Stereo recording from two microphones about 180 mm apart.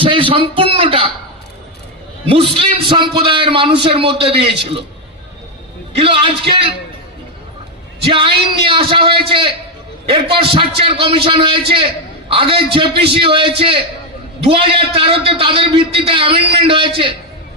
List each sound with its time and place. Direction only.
0.0 s speech: 30° right (ahead or behind)
2.2 s a man's voice: 30° right (ahead or behind)
6.0 s a man's voice: 30° right (ahead or behind)
8.0 s a man's voice: 30° right (ahead or behind)